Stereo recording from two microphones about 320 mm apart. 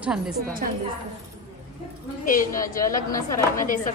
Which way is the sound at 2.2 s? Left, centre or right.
Left.